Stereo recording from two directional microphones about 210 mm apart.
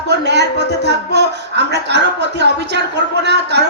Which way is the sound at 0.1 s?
55° right (ahead or behind).